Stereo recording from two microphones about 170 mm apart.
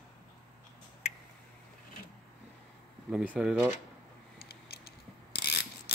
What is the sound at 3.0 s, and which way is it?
Speech, 5° right (ahead or behind).